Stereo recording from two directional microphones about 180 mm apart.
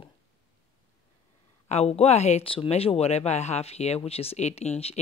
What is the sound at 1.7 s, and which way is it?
Speech, 35° left (ahead or behind).